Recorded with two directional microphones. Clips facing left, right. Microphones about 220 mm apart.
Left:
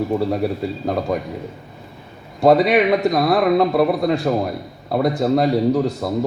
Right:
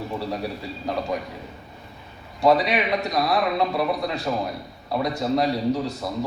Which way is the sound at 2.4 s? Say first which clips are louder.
Left 6 dB; 55° left (ahead or behind).